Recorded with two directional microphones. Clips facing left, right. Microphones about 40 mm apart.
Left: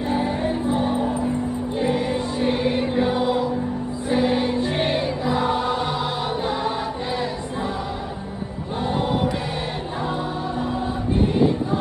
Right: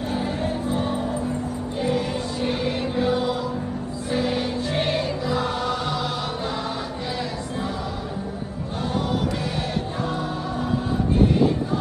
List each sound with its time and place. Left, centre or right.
0.1 s music: centre